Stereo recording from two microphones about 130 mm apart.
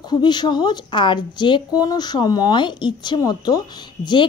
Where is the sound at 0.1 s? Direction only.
35° left (ahead or behind).